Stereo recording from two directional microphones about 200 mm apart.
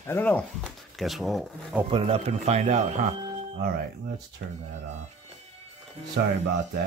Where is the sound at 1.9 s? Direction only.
25° right (ahead or behind).